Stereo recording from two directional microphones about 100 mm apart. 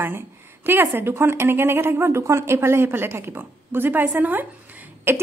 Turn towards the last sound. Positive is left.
turn(degrees=-25)  # may be behind; listen again after turning